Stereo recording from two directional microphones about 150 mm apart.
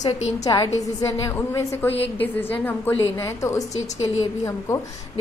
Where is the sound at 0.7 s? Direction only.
20° left (ahead or behind).